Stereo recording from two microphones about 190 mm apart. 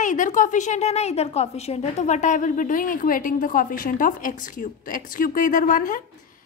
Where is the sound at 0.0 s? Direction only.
40° left (ahead or behind).